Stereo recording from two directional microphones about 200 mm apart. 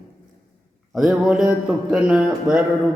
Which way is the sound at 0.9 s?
Centre (ahead or behind).